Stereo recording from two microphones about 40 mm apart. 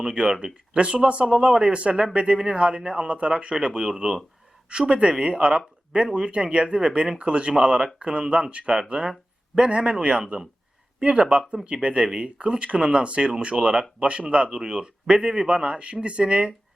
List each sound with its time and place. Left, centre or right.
0.0 s speech: centre